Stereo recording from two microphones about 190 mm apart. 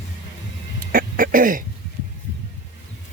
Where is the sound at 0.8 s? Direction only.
45° right (ahead or behind).